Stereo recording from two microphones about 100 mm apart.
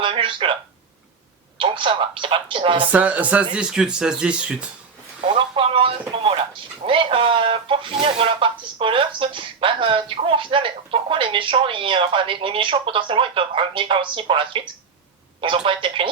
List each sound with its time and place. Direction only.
0.0 s speech: 60° right (ahead or behind)
1.5 s speech: 60° right (ahead or behind)
2.9 s speech: 15° right (ahead or behind)
5.5 s speech: 60° right (ahead or behind)